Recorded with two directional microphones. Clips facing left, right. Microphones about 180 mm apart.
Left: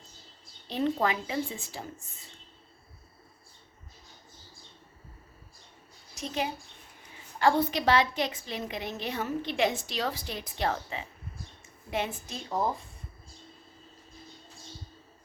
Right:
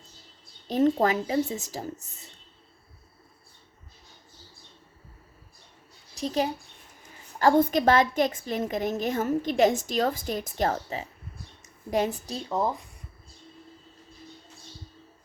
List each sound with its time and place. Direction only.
0.7 s speech: 45° right (ahead or behind)
6.1 s a woman's voice: 35° right (ahead or behind)